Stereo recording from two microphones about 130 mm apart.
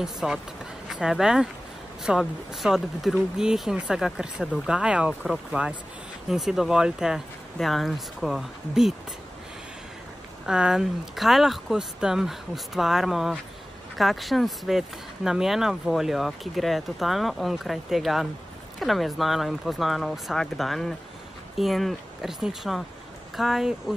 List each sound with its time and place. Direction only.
0.0 s speech: 5° right (ahead or behind)
10.4 s speech: 5° right (ahead or behind)